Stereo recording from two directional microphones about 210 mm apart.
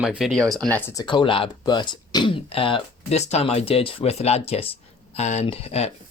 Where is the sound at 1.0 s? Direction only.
25° left (ahead or behind).